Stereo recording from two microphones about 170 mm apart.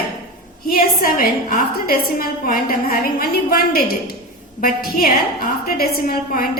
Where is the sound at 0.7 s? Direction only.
60° left (ahead or behind).